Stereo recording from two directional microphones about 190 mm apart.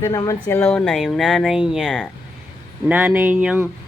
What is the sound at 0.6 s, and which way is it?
Speech, 5° left (ahead or behind).